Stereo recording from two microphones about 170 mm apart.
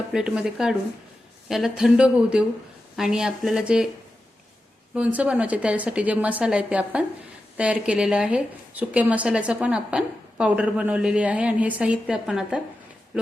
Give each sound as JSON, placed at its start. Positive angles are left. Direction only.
{"t": 0.1, "sound": "speech", "side_deg": -5}
{"t": 4.9, "sound": "a woman's voice", "side_deg": -5}